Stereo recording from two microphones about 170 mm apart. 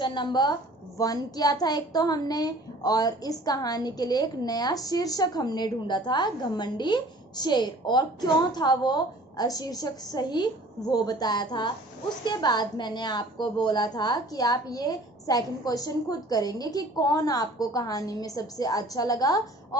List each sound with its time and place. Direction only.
0.0 s a child's voice: 25° left (ahead or behind)